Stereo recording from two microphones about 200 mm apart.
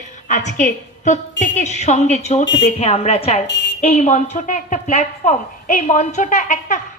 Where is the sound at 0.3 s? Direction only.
35° left (ahead or behind).